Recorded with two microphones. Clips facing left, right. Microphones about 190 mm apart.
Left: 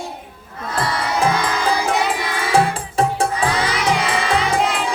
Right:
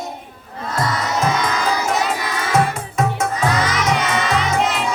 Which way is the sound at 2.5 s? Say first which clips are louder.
Left 1 dB; 30° left (ahead or behind).